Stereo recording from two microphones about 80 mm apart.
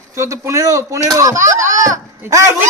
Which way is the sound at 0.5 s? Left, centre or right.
Right.